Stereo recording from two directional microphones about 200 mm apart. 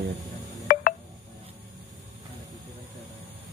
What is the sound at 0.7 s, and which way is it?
Telephone dialing, 45° left (ahead or behind).